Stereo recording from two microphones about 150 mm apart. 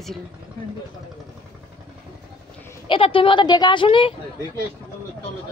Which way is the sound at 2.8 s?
35° left (ahead or behind).